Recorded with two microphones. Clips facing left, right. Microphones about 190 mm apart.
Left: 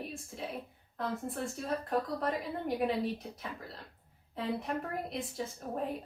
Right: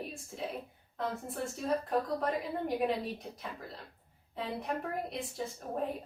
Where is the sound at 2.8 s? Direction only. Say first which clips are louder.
Left 3 dB; centre (ahead or behind).